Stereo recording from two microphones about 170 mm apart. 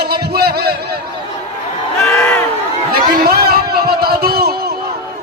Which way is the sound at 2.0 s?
5° left (ahead or behind).